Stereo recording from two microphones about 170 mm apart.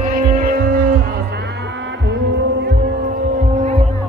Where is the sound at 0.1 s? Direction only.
55° right (ahead or behind).